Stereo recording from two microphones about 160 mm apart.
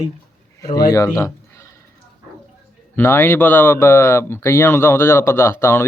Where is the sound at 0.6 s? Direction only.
20° left (ahead or behind).